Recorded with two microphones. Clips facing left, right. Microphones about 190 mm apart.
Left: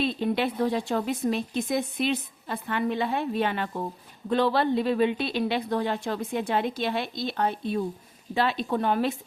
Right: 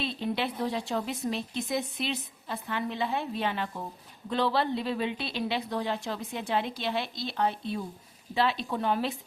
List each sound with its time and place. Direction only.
0.0 s speech: 50° left (ahead or behind)